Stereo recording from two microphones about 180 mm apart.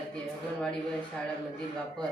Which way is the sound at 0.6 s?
5° left (ahead or behind).